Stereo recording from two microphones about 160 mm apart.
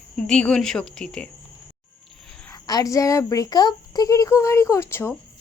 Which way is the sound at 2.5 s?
25° left (ahead or behind).